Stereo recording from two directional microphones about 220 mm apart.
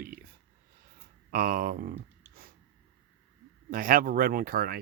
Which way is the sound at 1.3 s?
40° right (ahead or behind).